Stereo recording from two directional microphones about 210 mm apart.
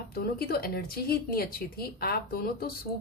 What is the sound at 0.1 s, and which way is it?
Speech, 45° left (ahead or behind).